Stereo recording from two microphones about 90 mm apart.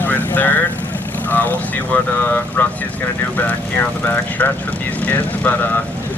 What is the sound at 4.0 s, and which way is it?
Speech, 20° left (ahead or behind).